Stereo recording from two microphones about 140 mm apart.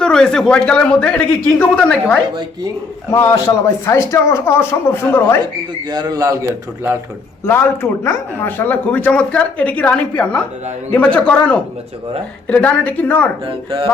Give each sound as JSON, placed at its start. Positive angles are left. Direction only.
{"t": 0.0, "sound": "speech", "side_deg": 5}
{"t": 3.1, "sound": "a man's voice", "side_deg": 20}
{"t": 5.9, "sound": "a man's voice", "side_deg": -30}
{"t": 7.4, "sound": "speech", "side_deg": 15}
{"t": 13.4, "sound": "speech", "side_deg": -40}